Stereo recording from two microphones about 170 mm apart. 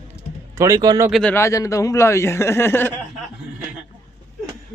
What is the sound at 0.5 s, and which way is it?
Speech, 20° right (ahead or behind).